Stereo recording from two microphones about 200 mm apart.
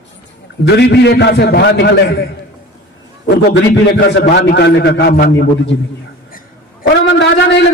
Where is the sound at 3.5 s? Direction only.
60° left (ahead or behind).